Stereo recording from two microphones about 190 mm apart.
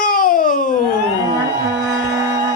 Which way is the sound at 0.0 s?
45° left (ahead or behind).